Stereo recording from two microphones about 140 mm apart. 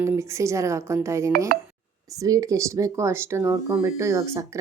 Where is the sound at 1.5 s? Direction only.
90° right.